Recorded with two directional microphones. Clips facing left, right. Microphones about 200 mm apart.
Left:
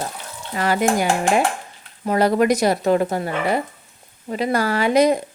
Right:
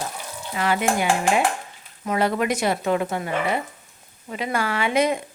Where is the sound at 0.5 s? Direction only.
40° left (ahead or behind).